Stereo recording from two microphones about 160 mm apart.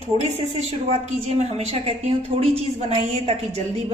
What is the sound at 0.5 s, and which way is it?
A woman's voice, 40° right (ahead or behind).